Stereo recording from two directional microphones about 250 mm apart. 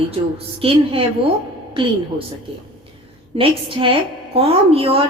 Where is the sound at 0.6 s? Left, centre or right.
Right.